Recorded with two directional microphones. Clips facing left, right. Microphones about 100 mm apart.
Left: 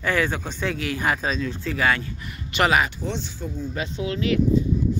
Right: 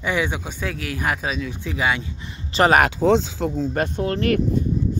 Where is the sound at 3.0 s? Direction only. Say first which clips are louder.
Right 12 dB; 90° right.